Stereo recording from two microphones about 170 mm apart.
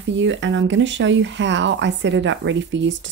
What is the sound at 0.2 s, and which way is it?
Speech, 90° right.